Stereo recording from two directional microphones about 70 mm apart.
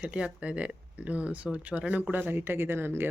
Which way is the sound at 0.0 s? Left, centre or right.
Centre.